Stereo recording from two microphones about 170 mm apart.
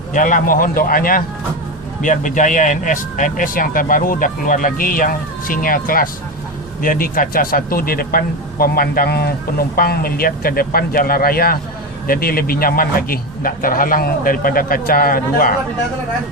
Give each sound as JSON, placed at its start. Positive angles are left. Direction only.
{"t": 0.1, "sound": "speech", "side_deg": 50}